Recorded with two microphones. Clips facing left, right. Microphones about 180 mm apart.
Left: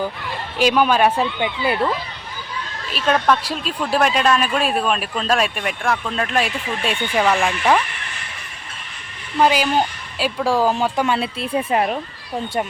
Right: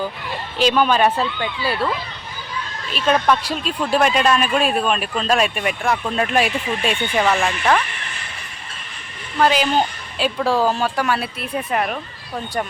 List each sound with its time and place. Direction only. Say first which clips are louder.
0.6 s speech: even; 10° left (ahead or behind)
2.9 s speech: even; centre (ahead or behind)
6.8 s speech: left 1 dB; 5° left (ahead or behind)
9.4 s speech: even; 10° left (ahead or behind); by 11.9 s 25° left (ahead or behind)